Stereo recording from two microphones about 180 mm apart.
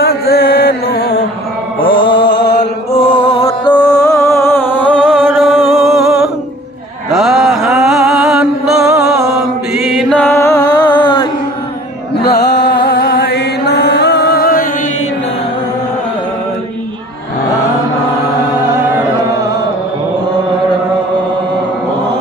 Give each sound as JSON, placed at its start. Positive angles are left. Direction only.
{"t": 0.0, "sound": "music", "side_deg": 60}
{"t": 2.0, "sound": "mantra", "side_deg": 80}
{"t": 2.9, "sound": "music", "side_deg": 30}
{"t": 3.8, "sound": "music", "side_deg": 20}
{"t": 7.1, "sound": "mantra", "side_deg": 0}
{"t": 9.8, "sound": "music", "side_deg": 0}
{"t": 12.2, "sound": "music", "side_deg": 65}